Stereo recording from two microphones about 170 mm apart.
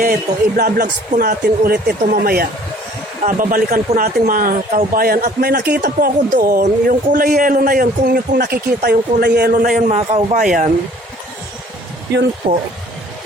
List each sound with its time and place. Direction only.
0.0 s speech: 55° right (ahead or behind); by 10.3 s 35° right (ahead or behind)
10.3 s speech: 50° right (ahead or behind)
12.4 s speech: 30° right (ahead or behind)